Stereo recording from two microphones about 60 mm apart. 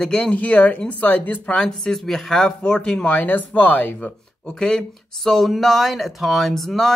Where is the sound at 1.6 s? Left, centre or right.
Centre; by 4.5 s left.